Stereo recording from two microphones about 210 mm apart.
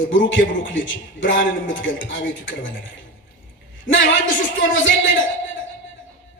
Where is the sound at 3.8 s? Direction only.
65° left (ahead or behind).